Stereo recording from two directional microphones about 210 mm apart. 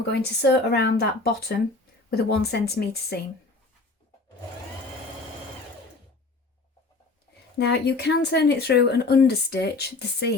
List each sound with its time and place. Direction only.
0.1 s speech: 50° left (ahead or behind)
7.6 s speech: 50° left (ahead or behind)